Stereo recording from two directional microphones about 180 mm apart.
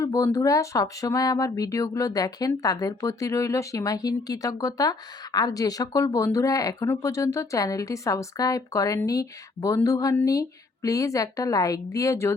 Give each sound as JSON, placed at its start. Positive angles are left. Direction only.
{"t": 0.0, "sound": "speech", "side_deg": 15}